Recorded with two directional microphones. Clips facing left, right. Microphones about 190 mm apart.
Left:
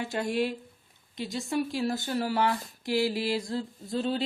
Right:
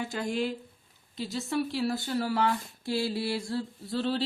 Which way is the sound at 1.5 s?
20° left (ahead or behind).